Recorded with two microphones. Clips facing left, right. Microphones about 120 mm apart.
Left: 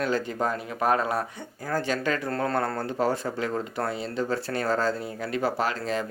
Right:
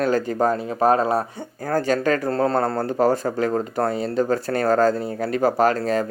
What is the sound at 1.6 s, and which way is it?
Speech, 45° right (ahead or behind).